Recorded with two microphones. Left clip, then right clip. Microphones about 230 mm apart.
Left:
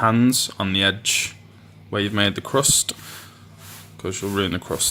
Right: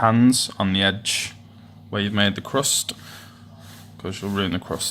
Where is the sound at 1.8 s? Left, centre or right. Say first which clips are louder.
Left 1 dB; left.